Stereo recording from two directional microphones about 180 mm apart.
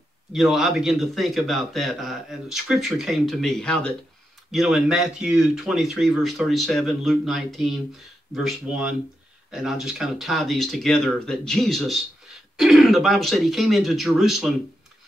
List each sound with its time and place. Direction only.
0.3 s a man's voice: centre (ahead or behind)